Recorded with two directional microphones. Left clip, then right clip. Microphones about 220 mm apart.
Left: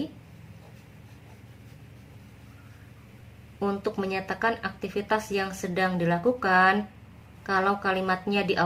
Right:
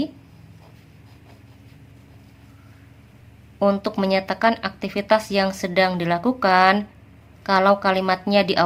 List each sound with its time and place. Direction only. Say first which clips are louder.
3.6 s speech: right 9 dB; 35° right (ahead or behind)